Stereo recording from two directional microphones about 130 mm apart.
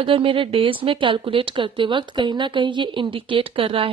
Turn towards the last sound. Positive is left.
turn(degrees=-45)  # may be behind; listen again after turning